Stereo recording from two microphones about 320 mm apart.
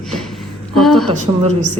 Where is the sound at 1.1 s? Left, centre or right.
Right.